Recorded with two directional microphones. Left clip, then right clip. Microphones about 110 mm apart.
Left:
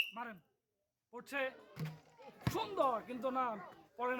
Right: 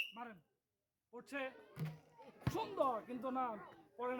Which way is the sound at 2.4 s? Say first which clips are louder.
Left 3 dB; 50° left (ahead or behind).